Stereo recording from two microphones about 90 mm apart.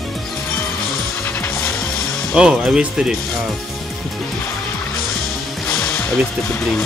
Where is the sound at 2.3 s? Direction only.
10° right (ahead or behind).